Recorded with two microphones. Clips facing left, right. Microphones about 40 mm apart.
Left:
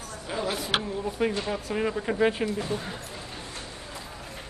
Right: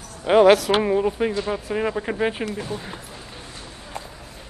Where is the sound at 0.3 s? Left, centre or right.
Right.